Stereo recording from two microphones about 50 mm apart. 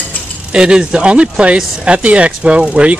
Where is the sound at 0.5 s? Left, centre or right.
Centre.